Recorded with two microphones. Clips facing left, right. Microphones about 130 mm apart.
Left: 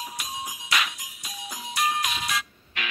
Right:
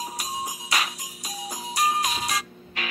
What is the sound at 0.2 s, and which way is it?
Music, 35° right (ahead or behind).